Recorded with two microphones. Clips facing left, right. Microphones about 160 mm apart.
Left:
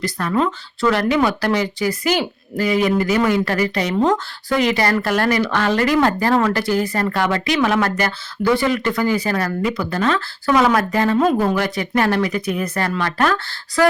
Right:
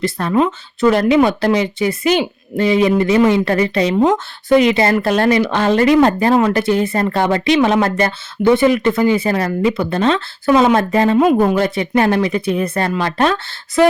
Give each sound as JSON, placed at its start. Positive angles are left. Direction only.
{"t": 0.0, "sound": "speech", "side_deg": -25}